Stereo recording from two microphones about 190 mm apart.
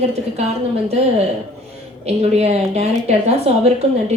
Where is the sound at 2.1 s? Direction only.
35° right (ahead or behind).